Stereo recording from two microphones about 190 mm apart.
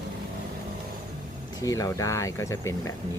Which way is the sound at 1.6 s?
15° left (ahead or behind).